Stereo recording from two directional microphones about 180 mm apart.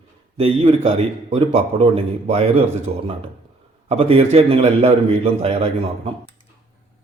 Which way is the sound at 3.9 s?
35° right (ahead or behind).